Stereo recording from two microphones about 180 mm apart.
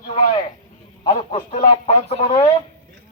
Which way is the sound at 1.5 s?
40° left (ahead or behind).